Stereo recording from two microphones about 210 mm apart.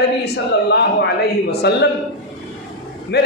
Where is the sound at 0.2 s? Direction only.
50° left (ahead or behind).